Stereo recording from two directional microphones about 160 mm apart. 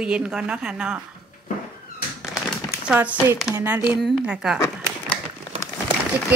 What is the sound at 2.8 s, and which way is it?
A woman's voice, 10° right (ahead or behind).